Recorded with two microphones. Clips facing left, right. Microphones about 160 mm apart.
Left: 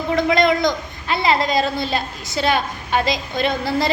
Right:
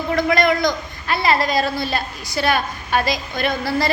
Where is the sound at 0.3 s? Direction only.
20° left (ahead or behind).